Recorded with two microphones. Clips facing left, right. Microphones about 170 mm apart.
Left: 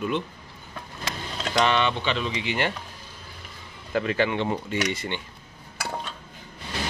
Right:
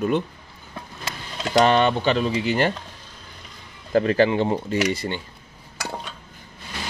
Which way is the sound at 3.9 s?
40° right (ahead or behind).